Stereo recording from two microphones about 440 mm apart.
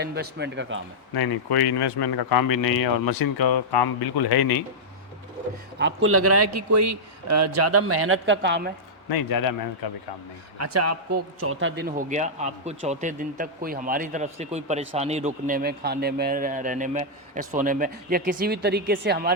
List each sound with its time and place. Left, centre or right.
0.0 s speech: right
1.1 s speech: left
5.8 s a man's voice: right
9.0 s speech: left
10.6 s a man's voice: right